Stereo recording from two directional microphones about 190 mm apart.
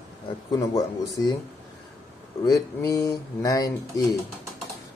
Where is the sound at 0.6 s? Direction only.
20° left (ahead or behind).